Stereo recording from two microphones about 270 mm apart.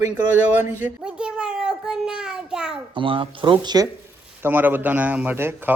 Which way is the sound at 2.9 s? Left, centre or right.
Centre.